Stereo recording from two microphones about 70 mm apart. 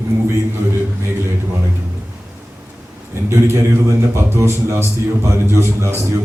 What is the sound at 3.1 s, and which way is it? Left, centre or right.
A man's voice, right.